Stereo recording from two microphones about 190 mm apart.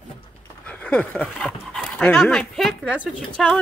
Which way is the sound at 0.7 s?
5° left (ahead or behind).